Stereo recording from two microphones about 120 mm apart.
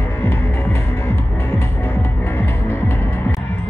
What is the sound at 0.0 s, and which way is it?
Throbbing, 20° left (ahead or behind).